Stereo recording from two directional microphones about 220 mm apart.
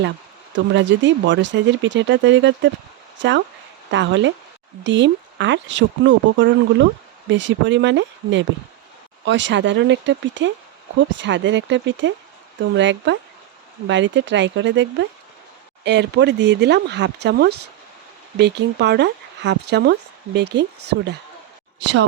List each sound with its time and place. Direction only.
0.5 s speech: 55° right (ahead or behind)